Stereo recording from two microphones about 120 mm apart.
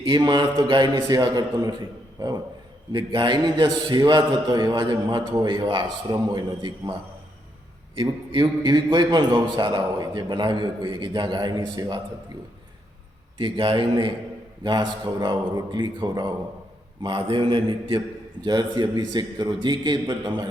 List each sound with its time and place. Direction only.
0.0 s a man's voice: 40° right (ahead or behind)
2.9 s a man's voice: 40° right (ahead or behind)
8.3 s a man's voice: 40° right (ahead or behind)
13.4 s a man's voice: 45° right (ahead or behind)